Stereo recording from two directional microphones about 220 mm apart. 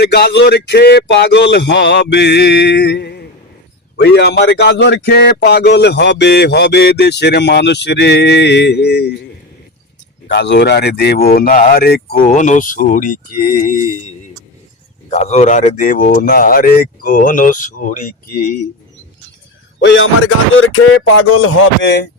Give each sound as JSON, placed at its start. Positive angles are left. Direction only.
{"t": 0.0, "sound": "speech", "side_deg": 50}
{"t": 10.2, "sound": "speech", "side_deg": 50}
{"t": 15.1, "sound": "speech", "side_deg": 30}
{"t": 19.8, "sound": "speech", "side_deg": 55}